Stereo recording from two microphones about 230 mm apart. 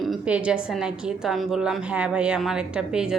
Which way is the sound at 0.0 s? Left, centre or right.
Centre.